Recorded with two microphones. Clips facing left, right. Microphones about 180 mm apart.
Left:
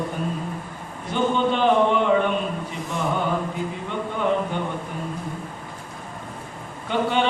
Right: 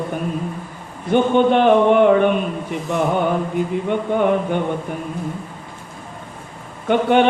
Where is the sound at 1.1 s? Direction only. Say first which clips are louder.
Right 7 dB; 60° right (ahead or behind).